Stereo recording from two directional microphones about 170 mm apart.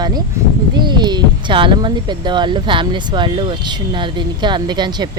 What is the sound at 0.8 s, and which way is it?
Speech, 25° right (ahead or behind).